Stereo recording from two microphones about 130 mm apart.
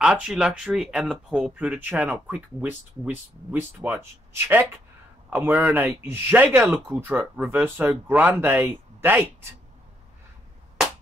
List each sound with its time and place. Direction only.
0.0 s speech: 5° right (ahead or behind)